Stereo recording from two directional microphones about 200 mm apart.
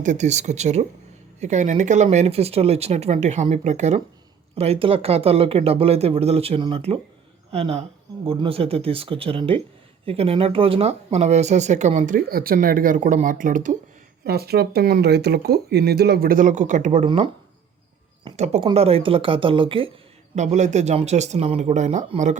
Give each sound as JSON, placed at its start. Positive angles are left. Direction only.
{"t": 0.0, "sound": "speech", "side_deg": -35}
{"t": 14.3, "sound": "speech", "side_deg": -50}
{"t": 18.3, "sound": "speech", "side_deg": -35}